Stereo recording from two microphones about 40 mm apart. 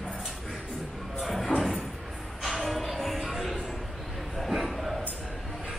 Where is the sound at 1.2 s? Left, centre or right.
Centre.